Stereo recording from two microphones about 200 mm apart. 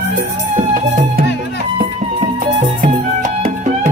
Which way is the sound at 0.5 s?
45° right (ahead or behind).